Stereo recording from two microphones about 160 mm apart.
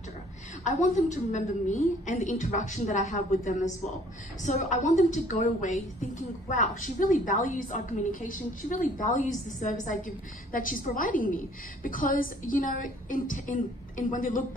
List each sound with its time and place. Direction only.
0.7 s a woman's voice: 50° left (ahead or behind)